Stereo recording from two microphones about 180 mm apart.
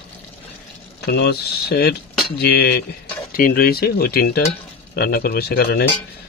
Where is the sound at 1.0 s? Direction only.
65° left (ahead or behind).